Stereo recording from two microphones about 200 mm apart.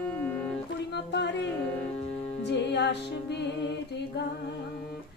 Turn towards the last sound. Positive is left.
turn(degrees=60)  # may be behind; listen again after turning